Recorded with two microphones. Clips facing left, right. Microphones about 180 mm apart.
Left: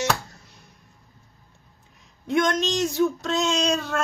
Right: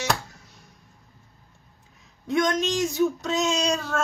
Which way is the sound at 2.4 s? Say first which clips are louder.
Left 1 dB; 10° right (ahead or behind).